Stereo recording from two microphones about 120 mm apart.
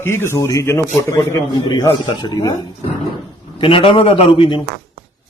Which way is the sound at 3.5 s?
45° left (ahead or behind).